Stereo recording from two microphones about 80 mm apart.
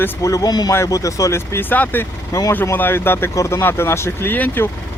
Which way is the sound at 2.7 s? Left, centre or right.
Left.